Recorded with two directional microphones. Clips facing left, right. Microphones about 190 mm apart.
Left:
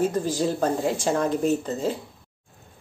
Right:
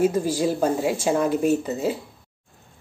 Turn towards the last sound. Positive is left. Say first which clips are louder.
# right 2 dB
turn(degrees=-10)  # may be behind; listen again after turning